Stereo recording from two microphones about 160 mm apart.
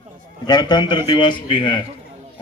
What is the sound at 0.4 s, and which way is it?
A man's voice, 25° left (ahead or behind).